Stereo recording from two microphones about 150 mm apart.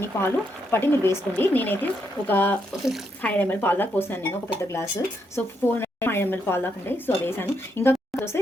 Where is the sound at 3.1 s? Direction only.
10° left (ahead or behind).